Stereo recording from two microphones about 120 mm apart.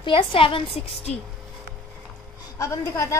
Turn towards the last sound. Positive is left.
turn(degrees=25)  # may be behind; listen again after turning